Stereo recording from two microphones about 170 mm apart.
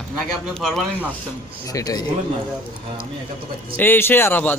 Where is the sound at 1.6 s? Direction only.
20° left (ahead or behind).